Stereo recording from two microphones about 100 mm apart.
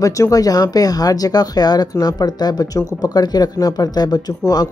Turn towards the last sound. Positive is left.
turn(degrees=40)  # may be behind; listen again after turning